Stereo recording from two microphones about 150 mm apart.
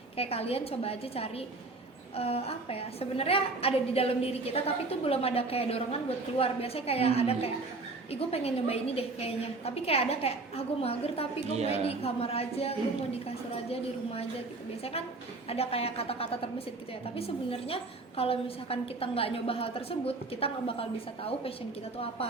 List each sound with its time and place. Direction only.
0.2 s a woman's voice: 40° left (ahead or behind)
11.5 s a woman's voice: 45° right (ahead or behind)
11.9 s a woman's voice: 40° left (ahead or behind)
15.4 s a woman's voice: 40° left (ahead or behind)